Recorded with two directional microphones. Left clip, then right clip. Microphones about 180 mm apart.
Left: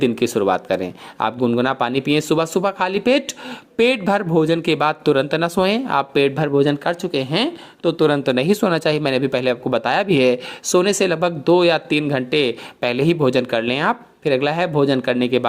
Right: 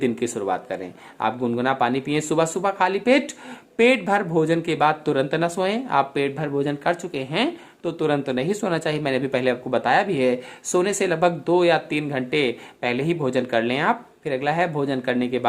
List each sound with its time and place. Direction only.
0.0 s speech: 35° left (ahead or behind)